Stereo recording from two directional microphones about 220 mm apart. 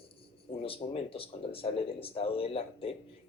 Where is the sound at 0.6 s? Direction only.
25° left (ahead or behind).